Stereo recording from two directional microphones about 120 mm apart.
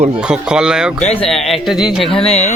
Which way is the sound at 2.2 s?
65° left (ahead or behind).